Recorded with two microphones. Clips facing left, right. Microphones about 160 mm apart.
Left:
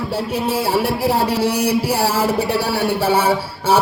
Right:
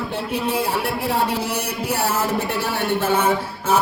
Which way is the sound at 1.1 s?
35° left (ahead or behind).